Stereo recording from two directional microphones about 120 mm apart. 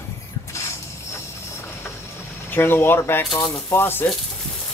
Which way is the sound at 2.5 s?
20° left (ahead or behind).